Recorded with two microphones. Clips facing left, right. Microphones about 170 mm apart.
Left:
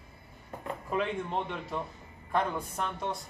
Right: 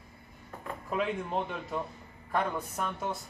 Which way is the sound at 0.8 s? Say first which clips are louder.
Even; 5° right (ahead or behind).